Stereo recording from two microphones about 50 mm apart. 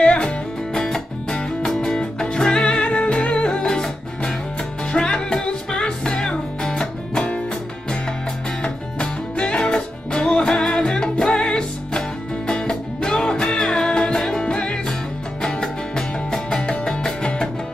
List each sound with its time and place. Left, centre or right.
0.0 s music: centre
1.9 s music: centre
8.6 s music: left